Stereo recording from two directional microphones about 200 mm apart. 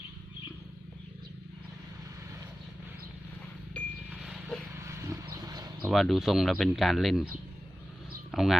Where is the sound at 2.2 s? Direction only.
15° right (ahead or behind).